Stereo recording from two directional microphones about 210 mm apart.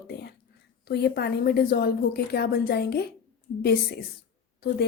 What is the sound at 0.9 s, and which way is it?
A woman's voice, 50° left (ahead or behind).